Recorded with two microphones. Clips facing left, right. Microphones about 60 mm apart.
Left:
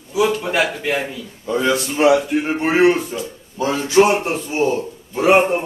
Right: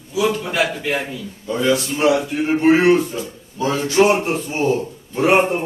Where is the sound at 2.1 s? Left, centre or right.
Left.